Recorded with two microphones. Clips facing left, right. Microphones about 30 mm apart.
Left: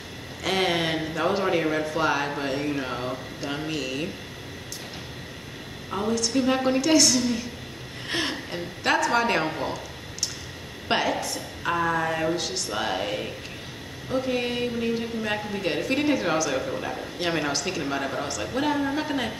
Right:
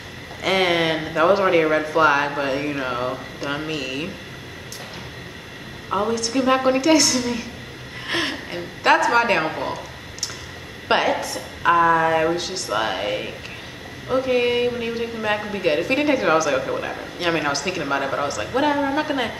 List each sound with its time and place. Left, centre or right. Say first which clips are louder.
0.4 s a man's voice: right 5 dB; centre
3.7 s a woman's voice: right 3 dB; centre
5.9 s a woman's voice: right 4 dB; right
10.9 s a woman's voice: right 5 dB; centre
11.6 s a sound: right 9 dB; right
12.4 s a man's voice: right 5 dB; centre